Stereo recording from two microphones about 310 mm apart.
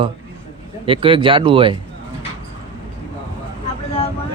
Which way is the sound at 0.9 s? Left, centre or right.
Centre.